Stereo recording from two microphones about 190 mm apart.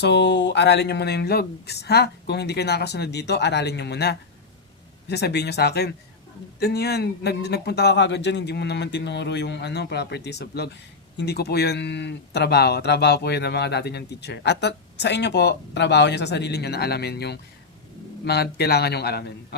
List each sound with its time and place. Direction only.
0.0 s speech: 65° left (ahead or behind)